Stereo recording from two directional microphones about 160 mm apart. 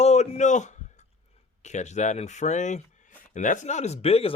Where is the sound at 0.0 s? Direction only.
45° left (ahead or behind).